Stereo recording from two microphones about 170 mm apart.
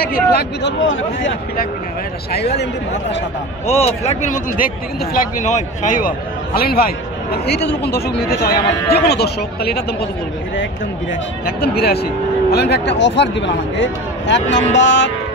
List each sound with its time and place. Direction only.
0.0 s speech: 65° left (ahead or behind); by 1.7 s 90° left
2.3 s speech: 70° left (ahead or behind)
3.6 s a man's voice: 35° left (ahead or behind); by 9.8 s 70° left (ahead or behind)
11.4 s speech: 65° left (ahead or behind); by 15.0 s 90° left